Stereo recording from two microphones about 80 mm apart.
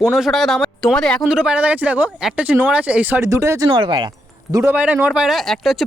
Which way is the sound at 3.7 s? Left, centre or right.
Right.